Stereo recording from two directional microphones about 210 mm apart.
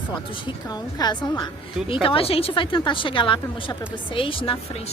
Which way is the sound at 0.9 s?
20° left (ahead or behind).